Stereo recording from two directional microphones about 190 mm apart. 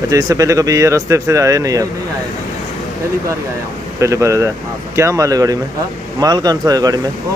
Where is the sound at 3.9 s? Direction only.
15° right (ahead or behind).